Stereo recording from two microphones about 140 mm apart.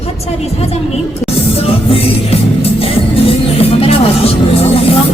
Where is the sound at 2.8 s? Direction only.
40° left (ahead or behind).